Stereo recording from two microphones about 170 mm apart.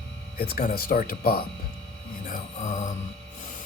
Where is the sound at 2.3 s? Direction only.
50° left (ahead or behind).